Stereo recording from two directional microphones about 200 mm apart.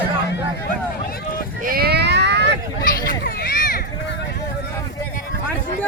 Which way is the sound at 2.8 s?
45° left (ahead or behind).